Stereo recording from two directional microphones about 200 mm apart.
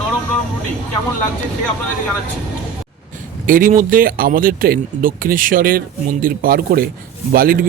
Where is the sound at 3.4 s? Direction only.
45° right (ahead or behind).